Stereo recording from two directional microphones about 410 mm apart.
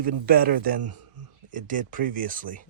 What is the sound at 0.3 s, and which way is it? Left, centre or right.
Speech, right.